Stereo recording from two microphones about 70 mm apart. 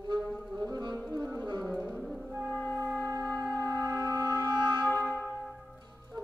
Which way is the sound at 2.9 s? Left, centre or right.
Right.